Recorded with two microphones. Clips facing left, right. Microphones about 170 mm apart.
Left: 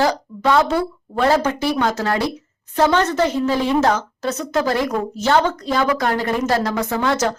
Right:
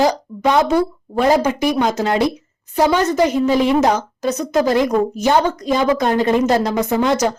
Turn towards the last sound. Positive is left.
turn(degrees=-15)  # may be behind; listen again after turning